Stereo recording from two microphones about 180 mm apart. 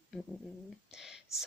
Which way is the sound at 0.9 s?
Centre (ahead or behind).